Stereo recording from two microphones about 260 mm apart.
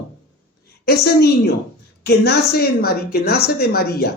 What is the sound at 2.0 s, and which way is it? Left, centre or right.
A woman's voice, left.